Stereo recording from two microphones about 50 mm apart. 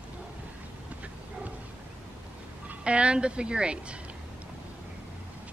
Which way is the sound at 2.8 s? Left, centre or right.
Right.